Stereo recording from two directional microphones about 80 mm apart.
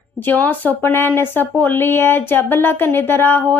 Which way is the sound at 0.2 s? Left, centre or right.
Left.